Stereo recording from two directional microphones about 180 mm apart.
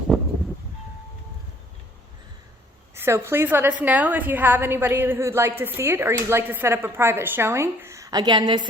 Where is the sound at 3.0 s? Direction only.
15° right (ahead or behind).